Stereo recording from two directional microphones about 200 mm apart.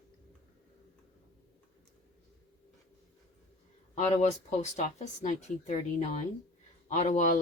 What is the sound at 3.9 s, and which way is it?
Speech, 35° left (ahead or behind).